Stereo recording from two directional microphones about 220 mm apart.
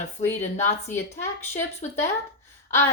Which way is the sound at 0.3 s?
30° left (ahead or behind).